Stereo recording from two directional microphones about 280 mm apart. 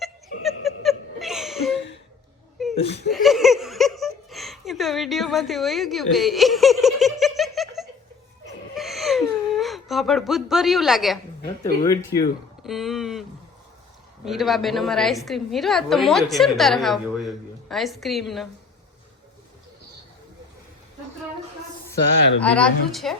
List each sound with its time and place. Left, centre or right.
0.4 s laughter: centre
2.8 s speech: left
3.1 s speech: centre
8.7 s whimper: centre
11.6 s speech: centre
12.6 s a woman's voice: centre
14.3 s a woman's voice: centre
22.4 s a woman's voice: centre